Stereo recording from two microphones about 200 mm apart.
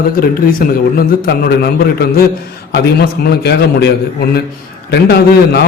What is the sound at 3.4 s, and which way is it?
Speech, 50° left (ahead or behind).